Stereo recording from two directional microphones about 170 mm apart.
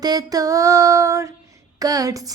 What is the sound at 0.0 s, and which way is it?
Female singing, 25° right (ahead or behind).